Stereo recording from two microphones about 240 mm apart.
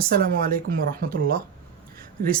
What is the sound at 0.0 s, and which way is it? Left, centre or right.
Speech, right.